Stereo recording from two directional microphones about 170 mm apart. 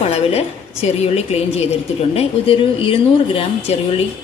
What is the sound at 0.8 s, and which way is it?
Speech, 40° left (ahead or behind).